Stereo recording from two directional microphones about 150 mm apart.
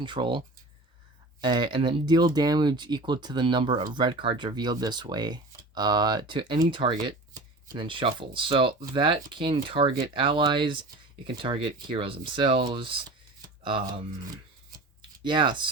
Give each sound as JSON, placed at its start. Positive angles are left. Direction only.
{"t": 0.0, "sound": "speech", "side_deg": -30}
{"t": 15.2, "sound": "speech", "side_deg": -30}